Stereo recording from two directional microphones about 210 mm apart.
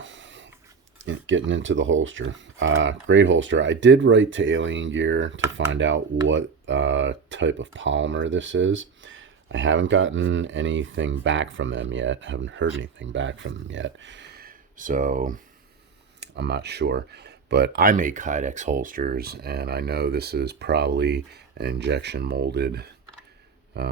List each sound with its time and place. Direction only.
0.0 s a sound: 60° right (ahead or behind)
0.9 s speech: 65° right (ahead or behind); by 15.4 s 40° right (ahead or behind)
16.2 s speech: 55° right (ahead or behind)